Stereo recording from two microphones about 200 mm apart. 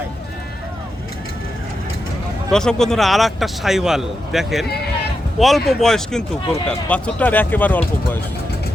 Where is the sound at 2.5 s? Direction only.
5° left (ahead or behind).